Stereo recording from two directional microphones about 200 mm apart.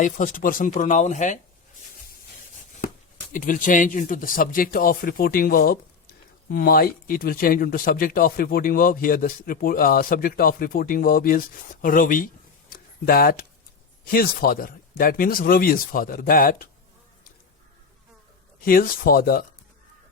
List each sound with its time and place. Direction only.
0.0 s speech: 40° left (ahead or behind)
3.3 s speech: 40° left (ahead or behind)
12.7 s a sound: 50° left (ahead or behind)
14.0 s speech: 50° left (ahead or behind)
18.6 s speech: 45° left (ahead or behind)